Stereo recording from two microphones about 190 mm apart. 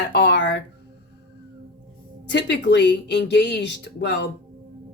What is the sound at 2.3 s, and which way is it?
Speech, 65° left (ahead or behind).